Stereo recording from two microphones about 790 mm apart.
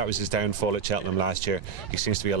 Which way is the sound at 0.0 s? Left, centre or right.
Right.